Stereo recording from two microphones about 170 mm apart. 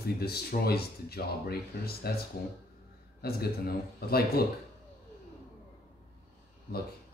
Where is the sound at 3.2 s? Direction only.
65° left (ahead or behind).